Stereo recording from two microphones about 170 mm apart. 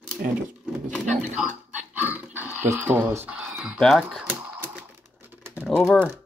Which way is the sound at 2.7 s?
10° right (ahead or behind).